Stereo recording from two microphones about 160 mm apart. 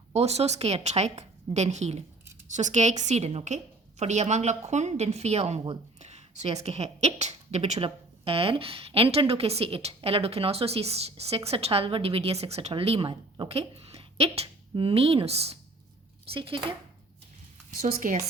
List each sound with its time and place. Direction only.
0.1 s a woman's voice: 40° right (ahead or behind)
17.9 s a woman's voice: 50° right (ahead or behind)